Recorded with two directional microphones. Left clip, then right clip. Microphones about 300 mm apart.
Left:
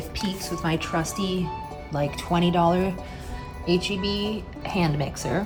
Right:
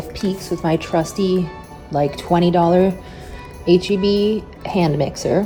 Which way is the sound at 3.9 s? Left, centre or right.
Left.